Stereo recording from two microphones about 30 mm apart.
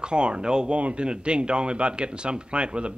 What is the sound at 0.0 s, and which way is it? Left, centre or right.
Speech, right.